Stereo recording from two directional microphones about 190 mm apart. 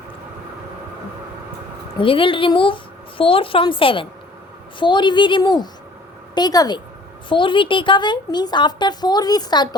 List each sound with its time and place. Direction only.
2.0 s a woman's voice: 25° left (ahead or behind)